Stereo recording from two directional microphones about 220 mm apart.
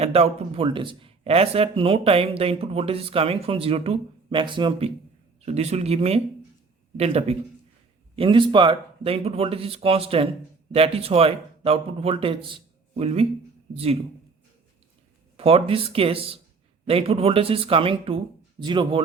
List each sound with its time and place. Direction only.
0.0 s speech: 25° right (ahead or behind)
15.4 s speech: 25° right (ahead or behind)